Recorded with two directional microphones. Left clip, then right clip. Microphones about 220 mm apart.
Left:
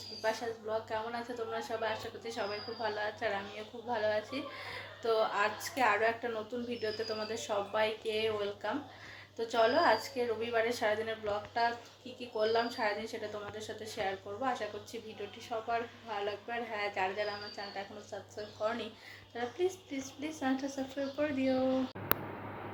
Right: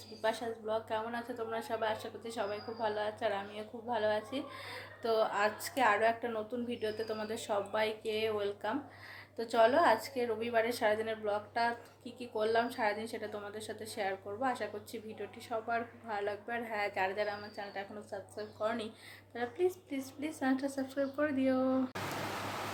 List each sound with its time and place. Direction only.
0.2 s speech: 15° right (ahead or behind)